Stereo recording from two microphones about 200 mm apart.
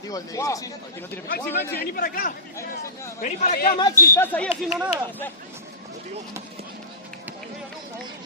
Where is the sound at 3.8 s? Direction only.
10° left (ahead or behind).